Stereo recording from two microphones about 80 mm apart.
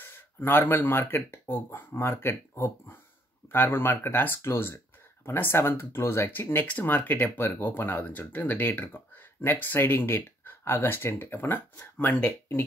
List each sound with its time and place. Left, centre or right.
0.0 s speech: left